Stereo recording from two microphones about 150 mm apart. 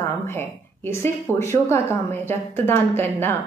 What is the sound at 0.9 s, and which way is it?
A woman's voice, 20° left (ahead or behind).